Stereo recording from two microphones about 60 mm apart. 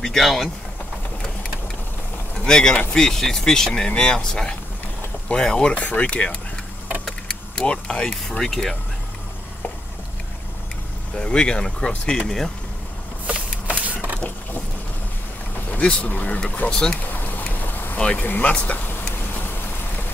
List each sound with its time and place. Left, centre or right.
0.0 s speech: centre
2.3 s speech: centre
5.8 s speech: left; by 8.7 s centre
11.1 s speech: centre
13.3 s a sound: right
15.8 s speech: left
16.7 s speech: centre
17.0 s a sound: left
17.9 s speech: centre
18.2 s speech: left